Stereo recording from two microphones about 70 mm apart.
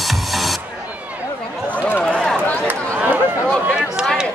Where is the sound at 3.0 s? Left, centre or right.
Right.